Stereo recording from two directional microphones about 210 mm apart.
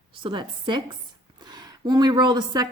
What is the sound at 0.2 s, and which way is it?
A woman's voice, 20° right (ahead or behind).